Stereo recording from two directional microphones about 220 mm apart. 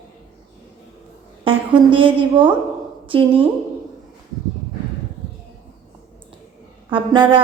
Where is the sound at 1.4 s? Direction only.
25° right (ahead or behind).